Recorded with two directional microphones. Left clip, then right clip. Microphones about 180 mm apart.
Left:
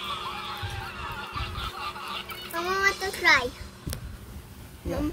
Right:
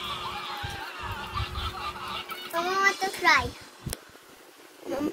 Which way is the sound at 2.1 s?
5° left (ahead or behind).